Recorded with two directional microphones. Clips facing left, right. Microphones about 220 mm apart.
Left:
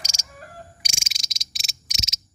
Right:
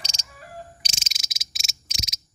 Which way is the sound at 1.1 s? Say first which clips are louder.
Left 1 dB; 5° right (ahead or behind).